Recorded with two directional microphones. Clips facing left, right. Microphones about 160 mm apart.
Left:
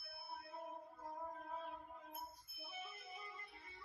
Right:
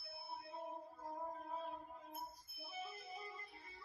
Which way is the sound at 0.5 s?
30° right (ahead or behind).